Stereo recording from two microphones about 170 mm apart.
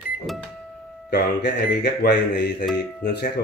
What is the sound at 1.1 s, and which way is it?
A man's voice, 75° left (ahead or behind).